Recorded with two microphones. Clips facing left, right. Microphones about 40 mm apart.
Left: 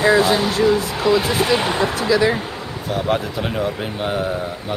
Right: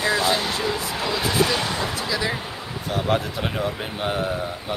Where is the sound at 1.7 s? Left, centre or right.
Left.